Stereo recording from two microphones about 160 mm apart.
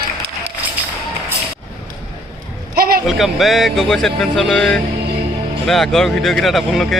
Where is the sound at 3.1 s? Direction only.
Centre (ahead or behind).